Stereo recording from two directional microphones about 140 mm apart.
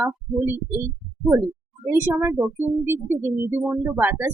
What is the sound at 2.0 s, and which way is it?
Speech, 15° right (ahead or behind).